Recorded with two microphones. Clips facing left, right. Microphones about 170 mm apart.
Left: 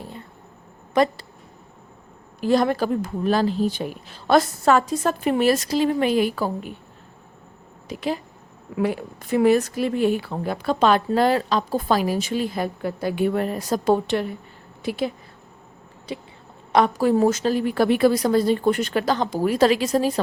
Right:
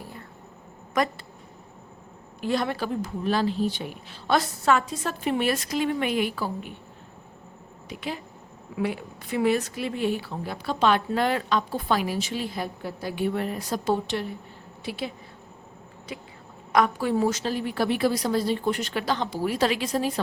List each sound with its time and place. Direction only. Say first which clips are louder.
0.0 s a sound: left 4 dB; 25° left (ahead or behind)
0.9 s speech: left 6 dB; 30° left (ahead or behind)
2.4 s speech: left 7 dB; 40° left (ahead or behind)
7.9 s speech: left 7 dB; 40° left (ahead or behind)
16.7 s speech: left 5 dB; 35° left (ahead or behind)